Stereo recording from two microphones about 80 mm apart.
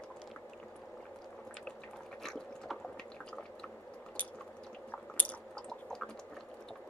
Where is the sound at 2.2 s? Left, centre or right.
Centre.